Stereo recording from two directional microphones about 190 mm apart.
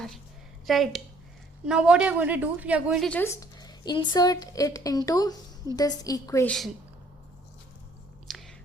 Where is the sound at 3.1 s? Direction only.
10° left (ahead or behind).